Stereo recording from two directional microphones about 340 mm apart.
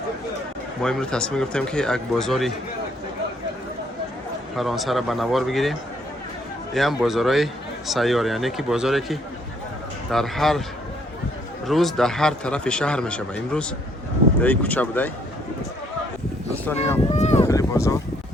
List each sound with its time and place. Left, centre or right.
0.8 s a man's voice: centre
4.5 s a man's voice: centre
6.7 s a man's voice: centre
11.6 s a man's voice: centre
16.9 s speech: centre